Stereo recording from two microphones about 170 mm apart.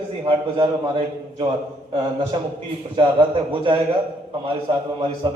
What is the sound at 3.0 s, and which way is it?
Speech, 30° right (ahead or behind).